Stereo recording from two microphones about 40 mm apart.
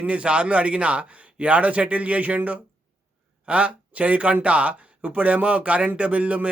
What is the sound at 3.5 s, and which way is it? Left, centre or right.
A man's voice, right.